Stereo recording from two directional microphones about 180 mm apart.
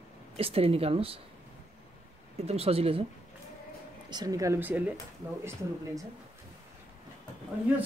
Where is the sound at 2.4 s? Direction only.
35° right (ahead or behind).